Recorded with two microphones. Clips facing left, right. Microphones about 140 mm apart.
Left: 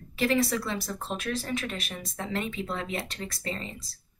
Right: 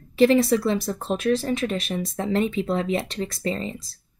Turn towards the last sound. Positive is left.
turn(degrees=-25)  # may be behind; listen again after turning